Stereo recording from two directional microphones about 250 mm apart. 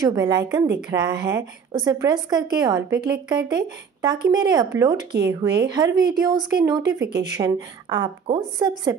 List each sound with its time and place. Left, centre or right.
0.0 s a woman's voice: centre